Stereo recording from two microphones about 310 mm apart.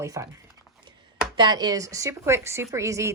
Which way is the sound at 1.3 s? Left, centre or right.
Centre.